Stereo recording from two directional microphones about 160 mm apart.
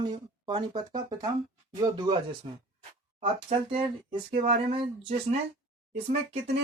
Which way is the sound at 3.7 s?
35° right (ahead or behind).